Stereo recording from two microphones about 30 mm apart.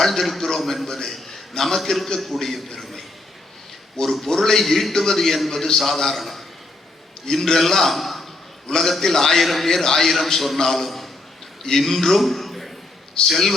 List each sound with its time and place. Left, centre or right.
0.0 s a sound: centre
0.9 s a man's voice: centre
4.0 s a man's voice: centre